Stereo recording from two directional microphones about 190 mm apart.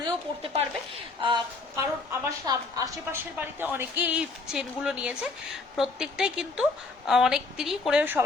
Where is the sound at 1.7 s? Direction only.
15° right (ahead or behind).